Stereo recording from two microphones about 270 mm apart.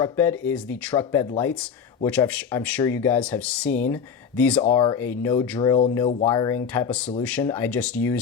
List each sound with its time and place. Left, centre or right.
0.0 s speech: centre